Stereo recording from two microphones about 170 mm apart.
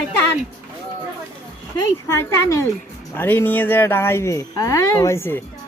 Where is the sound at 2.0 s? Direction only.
15° left (ahead or behind).